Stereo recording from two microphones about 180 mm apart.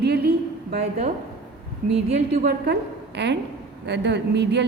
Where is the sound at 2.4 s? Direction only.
60° right (ahead or behind).